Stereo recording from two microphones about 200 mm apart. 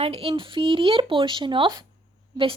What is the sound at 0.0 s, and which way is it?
Speech, 30° right (ahead or behind).